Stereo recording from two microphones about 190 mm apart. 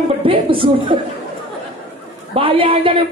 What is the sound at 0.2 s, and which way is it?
Speech, 30° right (ahead or behind).